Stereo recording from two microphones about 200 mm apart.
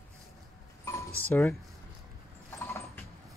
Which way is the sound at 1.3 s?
10° left (ahead or behind).